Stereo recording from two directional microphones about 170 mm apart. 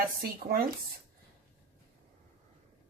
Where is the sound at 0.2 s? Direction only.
60° right (ahead or behind).